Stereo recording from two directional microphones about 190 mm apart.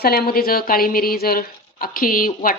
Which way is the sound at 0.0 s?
50° left (ahead or behind).